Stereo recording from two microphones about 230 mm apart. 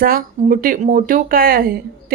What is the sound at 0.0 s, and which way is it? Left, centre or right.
Speech, right.